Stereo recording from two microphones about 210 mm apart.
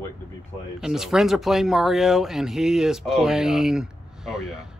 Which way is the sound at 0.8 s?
Centre (ahead or behind).